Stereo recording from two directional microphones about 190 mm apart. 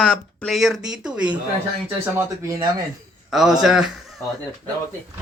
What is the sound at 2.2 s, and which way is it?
Speech, 15° right (ahead or behind).